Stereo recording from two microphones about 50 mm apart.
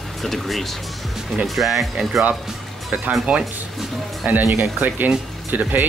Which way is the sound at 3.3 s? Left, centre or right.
Right.